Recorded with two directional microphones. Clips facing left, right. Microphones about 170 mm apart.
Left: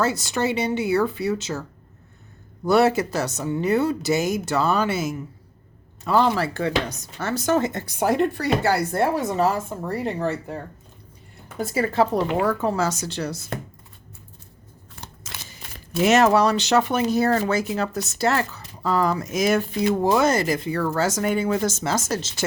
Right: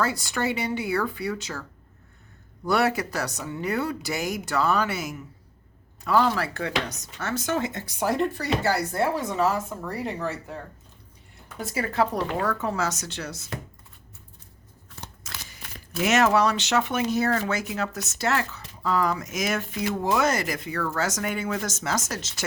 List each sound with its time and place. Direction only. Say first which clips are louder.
0.0 s speech: left 4 dB; 20° left (ahead or behind)
2.6 s speech: left 5 dB; 25° left (ahead or behind)
6.1 s chopping: left 3 dB; 25° left (ahead or behind)
11.6 s speech: left 4 dB; 30° left (ahead or behind)
12.5 s chopping: left 5 dB; 30° left (ahead or behind)
15.0 s speech: left 1 dB; 25° left (ahead or behind)